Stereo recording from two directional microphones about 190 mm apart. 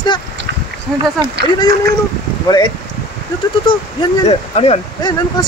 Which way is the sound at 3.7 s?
30° left (ahead or behind).